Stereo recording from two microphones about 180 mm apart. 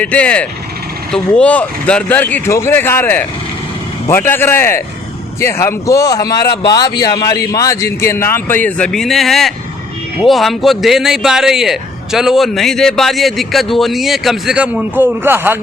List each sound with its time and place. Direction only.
0.0 s speech: 5° left (ahead or behind); by 15.5 s 10° right (ahead or behind)